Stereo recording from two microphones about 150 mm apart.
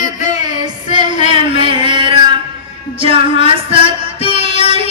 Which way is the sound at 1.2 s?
35° right (ahead or behind).